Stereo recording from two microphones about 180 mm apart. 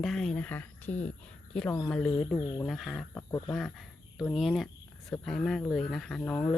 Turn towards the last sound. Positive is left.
turn(degrees=5)  # may be behind; listen again after turning